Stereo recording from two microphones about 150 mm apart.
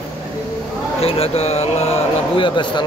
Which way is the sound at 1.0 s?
45° left (ahead or behind).